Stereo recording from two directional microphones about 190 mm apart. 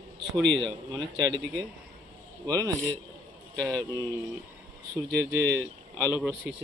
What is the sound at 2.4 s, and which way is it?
Speech, 20° right (ahead or behind).